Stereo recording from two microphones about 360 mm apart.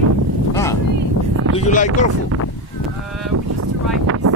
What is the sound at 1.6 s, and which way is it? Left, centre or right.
Speech, centre.